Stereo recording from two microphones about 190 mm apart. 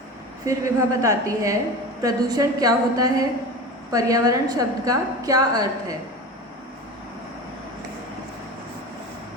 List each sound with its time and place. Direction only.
0.4 s a woman's voice: 15° right (ahead or behind)